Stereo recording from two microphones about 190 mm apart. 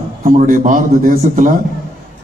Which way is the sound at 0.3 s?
45° right (ahead or behind).